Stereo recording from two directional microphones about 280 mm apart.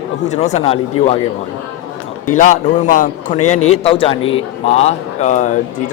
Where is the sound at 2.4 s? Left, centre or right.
Left.